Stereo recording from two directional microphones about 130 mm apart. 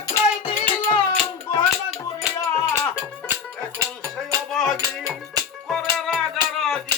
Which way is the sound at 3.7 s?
20° right (ahead or behind).